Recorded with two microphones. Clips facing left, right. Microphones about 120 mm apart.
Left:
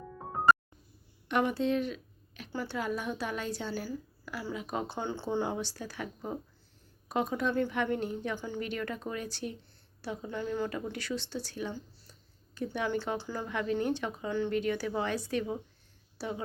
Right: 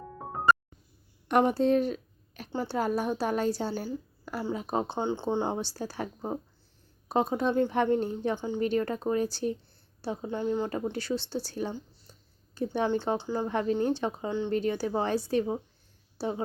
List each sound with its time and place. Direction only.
0.5 s music: centre (ahead or behind)
1.3 s a woman's voice: 40° right (ahead or behind)
2.5 s a woman's voice: 25° right (ahead or behind)
2.7 s a woman's voice: 40° right (ahead or behind)
4.9 s a woman's voice: 20° right (ahead or behind)
8.4 s speech: 20° right (ahead or behind)
8.6 s a woman's voice: 35° right (ahead or behind)
10.2 s speech: 20° right (ahead or behind)
10.9 s a woman's voice: 30° right (ahead or behind)
13.1 s speech: 20° right (ahead or behind)
13.5 s a woman's voice: 35° right (ahead or behind)
14.3 s speech: 20° right (ahead or behind)
14.5 s a woman's voice: 35° right (ahead or behind)